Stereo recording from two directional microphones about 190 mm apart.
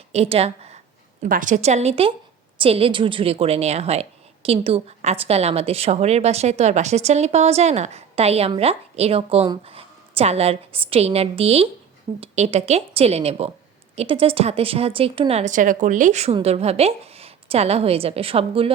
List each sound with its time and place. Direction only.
0.1 s a woman's voice: 35° right (ahead or behind)